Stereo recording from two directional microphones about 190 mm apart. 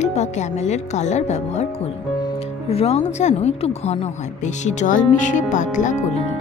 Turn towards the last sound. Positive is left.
turn(degrees=40)  # may be behind; listen again after turning